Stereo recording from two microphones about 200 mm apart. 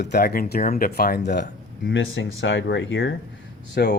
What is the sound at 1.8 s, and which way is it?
Speech, 70° left (ahead or behind).